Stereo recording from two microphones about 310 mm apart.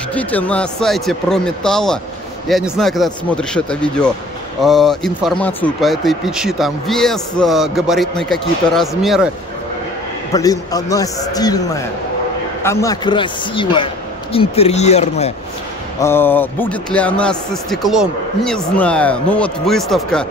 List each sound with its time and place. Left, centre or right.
0.1 s a man's voice: centre
10.3 s a man's voice: centre
16.0 s a man's voice: centre